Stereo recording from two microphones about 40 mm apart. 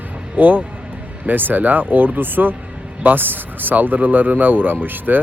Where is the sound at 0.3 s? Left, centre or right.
Right.